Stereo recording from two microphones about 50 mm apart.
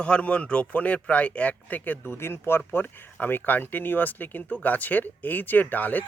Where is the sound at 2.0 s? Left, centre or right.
Left.